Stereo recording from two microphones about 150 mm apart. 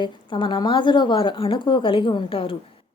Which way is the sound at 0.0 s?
35° left (ahead or behind).